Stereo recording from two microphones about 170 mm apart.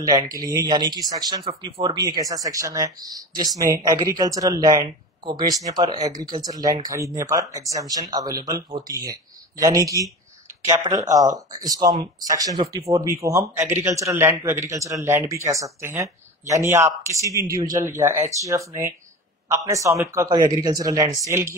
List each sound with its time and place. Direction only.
0.0 s speech: 20° right (ahead or behind)